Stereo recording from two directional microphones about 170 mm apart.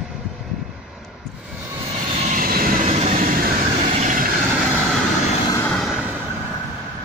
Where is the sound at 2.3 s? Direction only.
55° right (ahead or behind).